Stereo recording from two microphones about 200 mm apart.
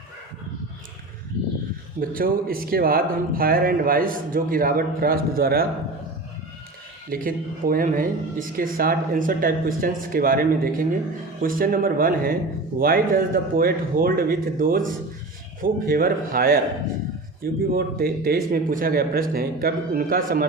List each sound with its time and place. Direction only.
2.0 s speech: 45° right (ahead or behind)
7.1 s speech: 45° right (ahead or behind)